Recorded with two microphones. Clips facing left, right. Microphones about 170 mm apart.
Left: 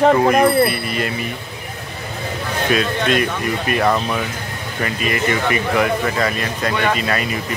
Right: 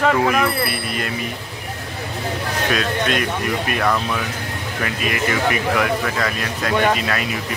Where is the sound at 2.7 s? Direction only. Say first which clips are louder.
Left 4 dB; centre (ahead or behind).